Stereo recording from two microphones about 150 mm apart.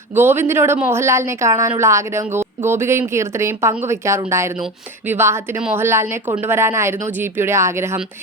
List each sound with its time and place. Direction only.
0.2 s a woman's voice: 15° right (ahead or behind)